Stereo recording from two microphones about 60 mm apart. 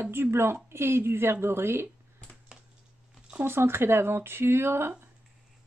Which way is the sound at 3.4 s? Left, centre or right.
Right.